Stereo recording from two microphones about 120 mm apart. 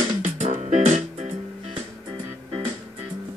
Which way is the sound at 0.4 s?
75° right (ahead or behind).